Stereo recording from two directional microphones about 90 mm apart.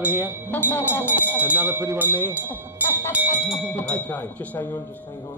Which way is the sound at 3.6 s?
15° left (ahead or behind).